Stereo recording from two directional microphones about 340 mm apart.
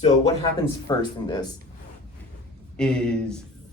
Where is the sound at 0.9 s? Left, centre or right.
Centre.